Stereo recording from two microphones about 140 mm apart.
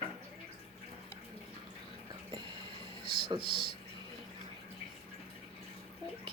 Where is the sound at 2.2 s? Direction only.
35° right (ahead or behind).